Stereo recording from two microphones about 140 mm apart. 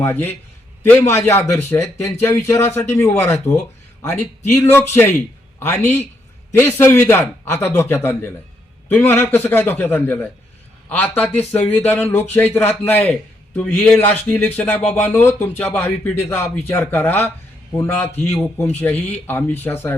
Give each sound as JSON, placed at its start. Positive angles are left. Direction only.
{"t": 0.0, "sound": "a man's voice", "side_deg": 15}